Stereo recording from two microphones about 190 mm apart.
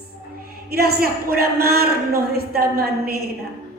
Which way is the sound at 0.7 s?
55° right (ahead or behind).